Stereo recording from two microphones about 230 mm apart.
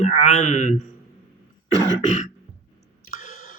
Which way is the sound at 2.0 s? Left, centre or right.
Left.